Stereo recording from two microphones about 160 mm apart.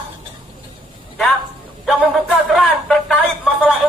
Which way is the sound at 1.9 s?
Centre (ahead or behind).